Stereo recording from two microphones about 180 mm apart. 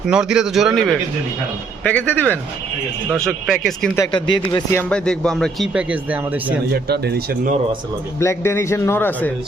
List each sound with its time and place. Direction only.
0.1 s a man's voice: 5° right (ahead or behind)
3.9 s speech: 20° left (ahead or behind)
4.7 s speech: 10° left (ahead or behind); by 6.4 s 10° right (ahead or behind)
6.7 s speech: 65° right (ahead or behind)
8.2 s a man's voice: 15° left (ahead or behind)